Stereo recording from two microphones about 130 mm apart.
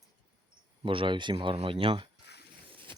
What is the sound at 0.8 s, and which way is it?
Speech, 40° right (ahead or behind).